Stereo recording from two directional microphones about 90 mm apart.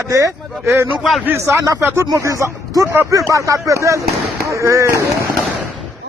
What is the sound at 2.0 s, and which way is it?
Speech, 40° right (ahead or behind).